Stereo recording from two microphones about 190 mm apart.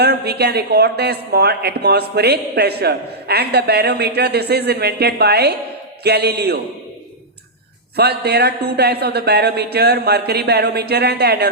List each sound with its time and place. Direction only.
0.0 s a woman's voice: 60° right (ahead or behind)
7.9 s a woman's voice: 60° right (ahead or behind)